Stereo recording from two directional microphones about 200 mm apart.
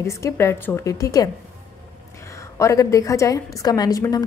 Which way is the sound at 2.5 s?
15° left (ahead or behind).